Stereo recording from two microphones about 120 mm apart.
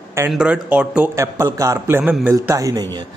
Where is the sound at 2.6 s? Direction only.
30° right (ahead or behind).